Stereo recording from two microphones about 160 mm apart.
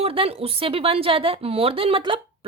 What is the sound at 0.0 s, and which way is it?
A woman's voice, 35° right (ahead or behind).